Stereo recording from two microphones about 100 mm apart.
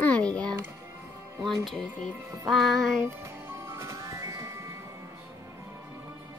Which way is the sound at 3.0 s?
25° right (ahead or behind).